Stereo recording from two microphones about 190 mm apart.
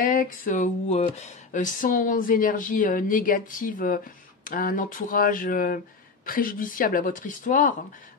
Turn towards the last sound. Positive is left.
turn(degrees=45)  # may be behind; listen again after turning